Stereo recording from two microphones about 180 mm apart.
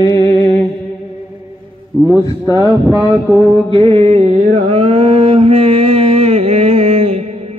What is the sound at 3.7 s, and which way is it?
Mantra, 30° right (ahead or behind).